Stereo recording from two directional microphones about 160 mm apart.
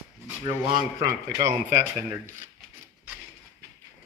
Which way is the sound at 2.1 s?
15° right (ahead or behind).